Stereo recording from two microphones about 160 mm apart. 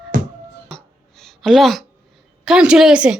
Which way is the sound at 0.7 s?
Centre (ahead or behind).